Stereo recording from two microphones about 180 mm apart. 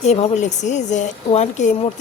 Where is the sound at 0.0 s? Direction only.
35° left (ahead or behind).